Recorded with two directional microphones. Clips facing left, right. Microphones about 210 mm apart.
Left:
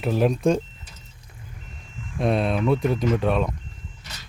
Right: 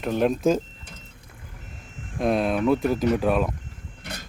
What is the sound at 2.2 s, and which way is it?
Speech, centre (ahead or behind).